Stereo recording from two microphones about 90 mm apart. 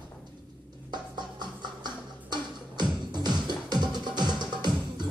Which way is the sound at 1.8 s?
55° right (ahead or behind).